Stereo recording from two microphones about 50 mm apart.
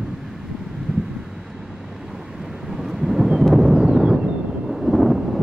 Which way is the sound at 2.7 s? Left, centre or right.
Centre.